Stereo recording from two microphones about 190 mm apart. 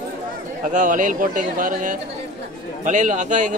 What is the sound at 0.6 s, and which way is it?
A man's voice, 40° right (ahead or behind).